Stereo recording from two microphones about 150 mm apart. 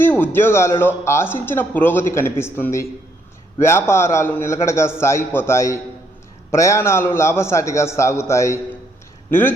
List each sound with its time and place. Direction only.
0.0 s a man's voice: 15° left (ahead or behind)